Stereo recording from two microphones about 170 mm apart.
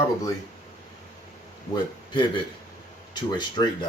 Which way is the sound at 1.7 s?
25° left (ahead or behind).